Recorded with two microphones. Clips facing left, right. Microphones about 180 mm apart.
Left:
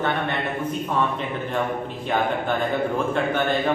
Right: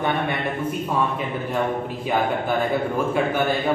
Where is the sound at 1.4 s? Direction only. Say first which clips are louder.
Right 2 dB; 5° right (ahead or behind).